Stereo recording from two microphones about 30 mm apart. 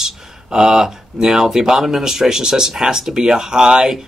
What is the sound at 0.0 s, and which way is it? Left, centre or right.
Speech, right.